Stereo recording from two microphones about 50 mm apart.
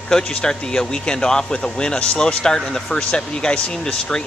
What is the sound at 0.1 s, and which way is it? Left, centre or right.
A woman's voice, centre.